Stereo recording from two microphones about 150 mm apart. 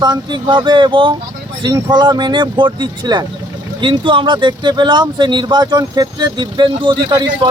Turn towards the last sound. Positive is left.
turn(degrees=-30)  # may be behind; listen again after turning